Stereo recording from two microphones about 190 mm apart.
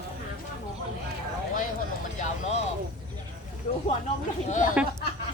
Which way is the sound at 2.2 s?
35° left (ahead or behind).